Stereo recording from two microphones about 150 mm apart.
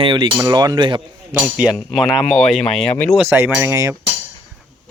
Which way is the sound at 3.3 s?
15° right (ahead or behind).